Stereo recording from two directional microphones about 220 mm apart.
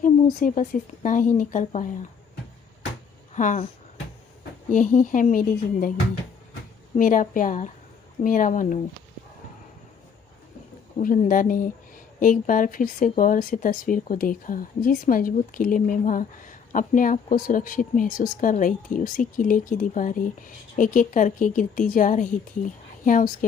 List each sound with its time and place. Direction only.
0.0 s speech: 35° left (ahead or behind)
3.3 s speech: 35° left (ahead or behind)
4.7 s speech: 35° left (ahead or behind)
6.9 s speech: 35° left (ahead or behind)
10.9 s speech: 35° left (ahead or behind)